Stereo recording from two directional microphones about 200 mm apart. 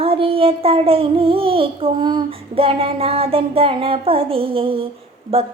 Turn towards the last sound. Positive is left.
turn(degrees=-30)  # may be behind; listen again after turning